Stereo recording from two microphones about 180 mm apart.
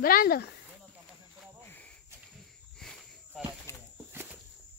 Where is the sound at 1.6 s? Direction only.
10° left (ahead or behind).